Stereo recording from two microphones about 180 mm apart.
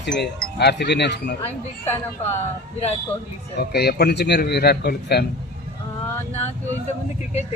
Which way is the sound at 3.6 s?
60° left (ahead or behind).